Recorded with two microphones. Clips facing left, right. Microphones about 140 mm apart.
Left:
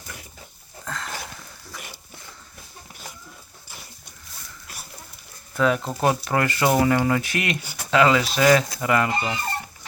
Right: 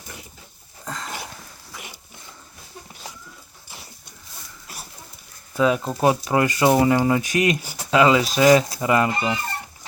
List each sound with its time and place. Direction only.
5.5 s speech: 15° right (ahead or behind)